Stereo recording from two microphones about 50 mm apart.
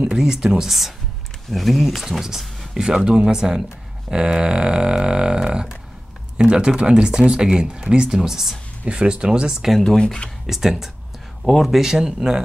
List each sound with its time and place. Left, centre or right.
0.1 s speech: centre
8.8 s speech: centre
9.8 s speech: centre
10.4 s speech: centre